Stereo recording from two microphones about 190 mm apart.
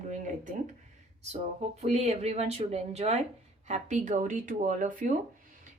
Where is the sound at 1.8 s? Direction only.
35° right (ahead or behind).